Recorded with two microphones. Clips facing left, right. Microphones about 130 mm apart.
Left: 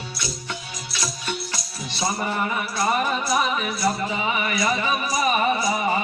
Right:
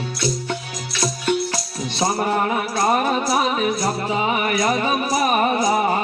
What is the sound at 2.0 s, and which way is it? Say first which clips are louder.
Music: right 5 dB; 50° right (ahead or behind).